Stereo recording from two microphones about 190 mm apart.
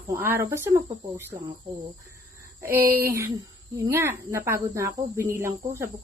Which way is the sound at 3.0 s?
15° right (ahead or behind).